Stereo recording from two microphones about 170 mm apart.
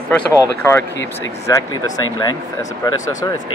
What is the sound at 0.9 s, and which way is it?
Speech, 90° left.